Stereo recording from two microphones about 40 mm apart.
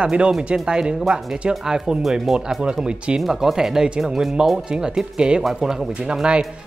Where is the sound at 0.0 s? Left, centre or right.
Right; by 2.3 s centre.